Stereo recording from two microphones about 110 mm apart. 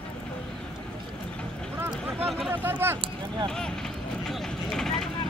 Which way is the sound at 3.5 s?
5° left (ahead or behind).